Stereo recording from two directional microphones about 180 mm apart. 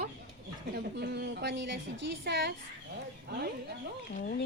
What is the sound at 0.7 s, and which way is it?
A woman's voice, 65° right (ahead or behind).